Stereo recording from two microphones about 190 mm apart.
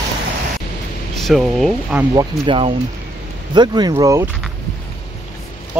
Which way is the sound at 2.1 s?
25° right (ahead or behind).